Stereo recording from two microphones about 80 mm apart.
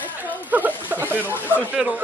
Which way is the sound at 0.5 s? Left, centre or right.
Right.